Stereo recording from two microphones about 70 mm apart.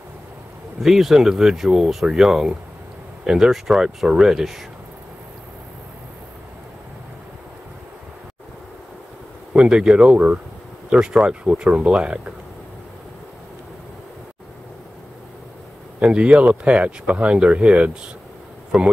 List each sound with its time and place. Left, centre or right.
0.8 s speech: centre
9.5 s speech: centre
16.0 s speech: centre
18.7 s speech: centre